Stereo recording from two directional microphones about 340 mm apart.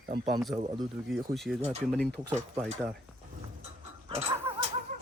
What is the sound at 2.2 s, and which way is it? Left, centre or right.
Speech, centre.